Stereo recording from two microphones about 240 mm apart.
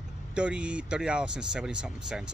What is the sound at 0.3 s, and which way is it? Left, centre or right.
Speech, centre.